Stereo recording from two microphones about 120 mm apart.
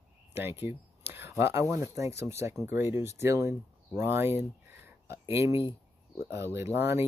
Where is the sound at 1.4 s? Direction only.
25° right (ahead or behind).